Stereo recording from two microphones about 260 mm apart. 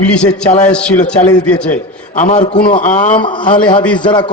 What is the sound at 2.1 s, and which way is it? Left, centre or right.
A man's voice, left.